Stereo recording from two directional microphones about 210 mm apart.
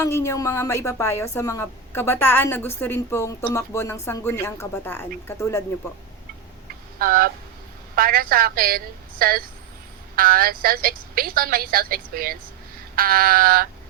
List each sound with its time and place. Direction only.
0.0 s a woman's voice: 15° left (ahead or behind)
7.0 s a woman's voice: 45° right (ahead or behind)